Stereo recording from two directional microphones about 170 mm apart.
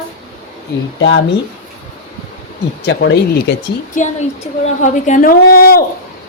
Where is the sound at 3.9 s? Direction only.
45° left (ahead or behind); by 5.8 s 60° left (ahead or behind).